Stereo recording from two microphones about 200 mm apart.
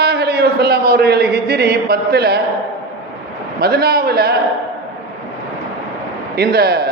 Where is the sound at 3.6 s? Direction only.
50° right (ahead or behind).